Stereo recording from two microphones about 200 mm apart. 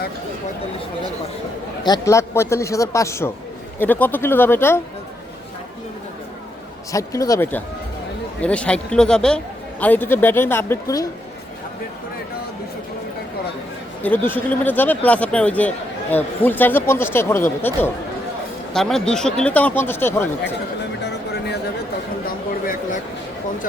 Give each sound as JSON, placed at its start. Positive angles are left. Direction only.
{"t": 1.8, "sound": "speech", "side_deg": 15}
{"t": 6.9, "sound": "speech", "side_deg": 15}
{"t": 14.0, "sound": "speech", "side_deg": 10}
{"t": 21.0, "sound": "a sound", "side_deg": 55}